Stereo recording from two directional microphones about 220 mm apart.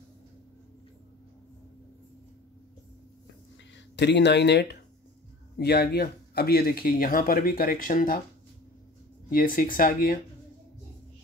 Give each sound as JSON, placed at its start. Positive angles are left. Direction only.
{"t": 3.7, "sound": "speech", "side_deg": 50}
{"t": 9.3, "sound": "speech", "side_deg": 40}